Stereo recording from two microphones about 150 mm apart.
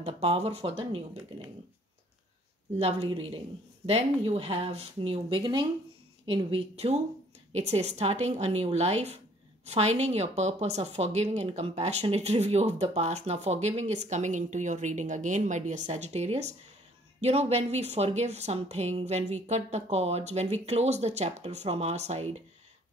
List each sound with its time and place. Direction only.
0.0 s a woman's voice: 45° right (ahead or behind)
3.8 s a woman's voice: 40° right (ahead or behind)